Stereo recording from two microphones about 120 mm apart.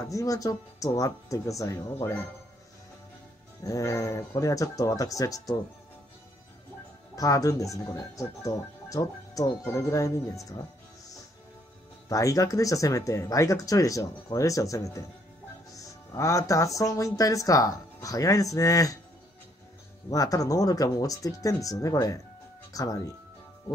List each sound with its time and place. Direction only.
0.0 s speech: 30° left (ahead or behind)
3.6 s speech: 25° left (ahead or behind)
7.2 s speech: 30° left (ahead or behind)
12.1 s speech: 25° left (ahead or behind)
20.1 s speech: 30° left (ahead or behind)